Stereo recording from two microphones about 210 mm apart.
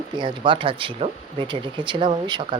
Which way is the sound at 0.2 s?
25° right (ahead or behind).